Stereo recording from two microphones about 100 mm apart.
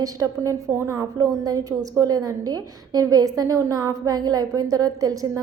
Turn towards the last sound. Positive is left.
turn(degrees=-35)  # may be behind; listen again after turning